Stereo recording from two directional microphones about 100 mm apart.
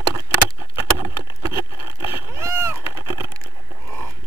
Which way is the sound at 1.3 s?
50° left (ahead or behind).